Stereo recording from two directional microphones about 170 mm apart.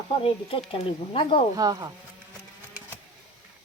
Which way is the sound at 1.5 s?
20° right (ahead or behind).